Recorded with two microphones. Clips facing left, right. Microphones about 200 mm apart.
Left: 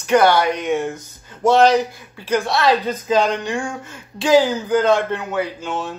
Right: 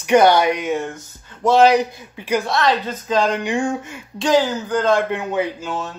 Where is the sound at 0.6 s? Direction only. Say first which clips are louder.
Left 2 dB; centre (ahead or behind).